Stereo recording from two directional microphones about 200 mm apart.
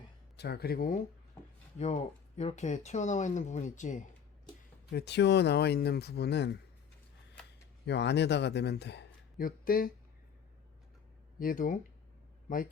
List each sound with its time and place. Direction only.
0.3 s speech: 55° left (ahead or behind)
1.8 s speech: 35° left (ahead or behind)
4.9 s speech: 55° left (ahead or behind)
7.9 s speech: 60° left (ahead or behind)
11.3 s a man's voice: 45° left (ahead or behind)